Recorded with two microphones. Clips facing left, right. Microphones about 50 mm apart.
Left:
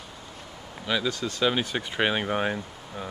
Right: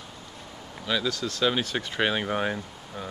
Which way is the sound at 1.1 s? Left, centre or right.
Left.